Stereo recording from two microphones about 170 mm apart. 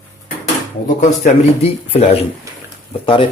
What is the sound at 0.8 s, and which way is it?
Speech, 50° left (ahead or behind).